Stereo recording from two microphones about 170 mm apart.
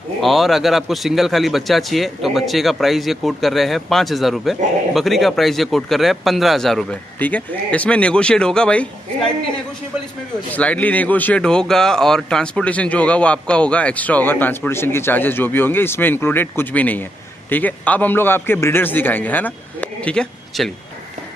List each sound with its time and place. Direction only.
0.2 s a man's voice: centre (ahead or behind)
10.5 s speech: 10° left (ahead or behind)